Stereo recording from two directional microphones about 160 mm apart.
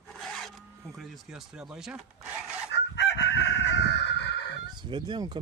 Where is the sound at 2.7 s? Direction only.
90° left.